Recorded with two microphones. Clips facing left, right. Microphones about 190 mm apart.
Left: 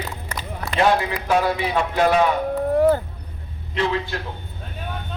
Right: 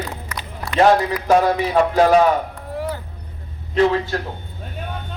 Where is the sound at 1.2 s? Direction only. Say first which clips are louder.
Right 5 dB; 45° right (ahead or behind).